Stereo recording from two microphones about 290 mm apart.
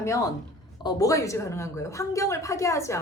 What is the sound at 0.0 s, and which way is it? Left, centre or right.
A woman's voice, centre.